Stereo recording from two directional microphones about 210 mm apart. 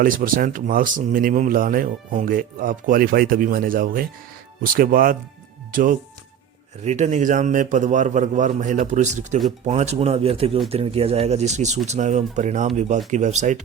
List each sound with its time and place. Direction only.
0.0 s speech: 40° right (ahead or behind)